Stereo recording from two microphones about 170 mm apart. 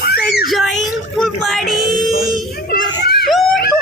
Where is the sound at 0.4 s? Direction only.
Centre (ahead or behind).